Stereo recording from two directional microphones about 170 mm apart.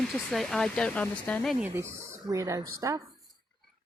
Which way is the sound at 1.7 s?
15° right (ahead or behind).